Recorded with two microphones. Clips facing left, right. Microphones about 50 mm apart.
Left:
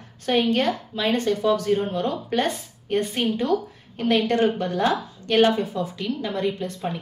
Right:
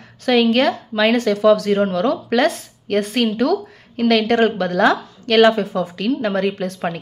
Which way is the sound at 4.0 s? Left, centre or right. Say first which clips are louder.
Right 5 dB; right.